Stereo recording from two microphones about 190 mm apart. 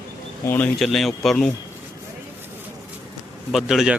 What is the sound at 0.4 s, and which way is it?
Speech, 10° left (ahead or behind).